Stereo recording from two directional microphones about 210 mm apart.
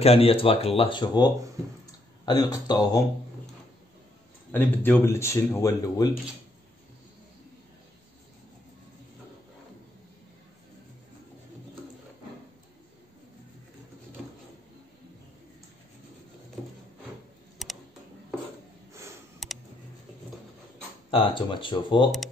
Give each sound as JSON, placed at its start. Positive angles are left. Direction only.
{"t": 0.0, "sound": "speech", "side_deg": 30}
{"t": 4.5, "sound": "speech", "side_deg": 10}
{"t": 17.6, "sound": "computer keyboard", "side_deg": 0}
{"t": 19.4, "sound": "a sound", "side_deg": 0}
{"t": 21.1, "sound": "speech", "side_deg": 25}